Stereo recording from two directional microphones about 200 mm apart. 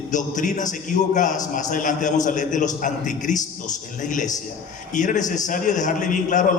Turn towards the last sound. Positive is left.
turn(degrees=40)  # may be behind; listen again after turning